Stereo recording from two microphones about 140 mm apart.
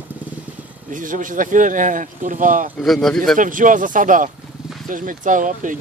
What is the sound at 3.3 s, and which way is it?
Speech, 70° right (ahead or behind).